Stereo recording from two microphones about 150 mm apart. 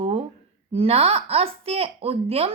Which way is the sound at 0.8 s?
40° right (ahead or behind).